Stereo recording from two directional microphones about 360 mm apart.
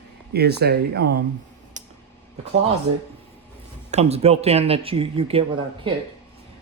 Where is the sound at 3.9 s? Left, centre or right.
Centre.